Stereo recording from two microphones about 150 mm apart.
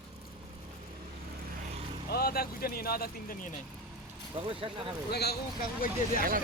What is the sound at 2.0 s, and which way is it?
Speech, 90° left.